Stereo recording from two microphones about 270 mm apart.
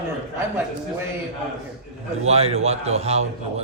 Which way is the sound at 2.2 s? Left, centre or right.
Right.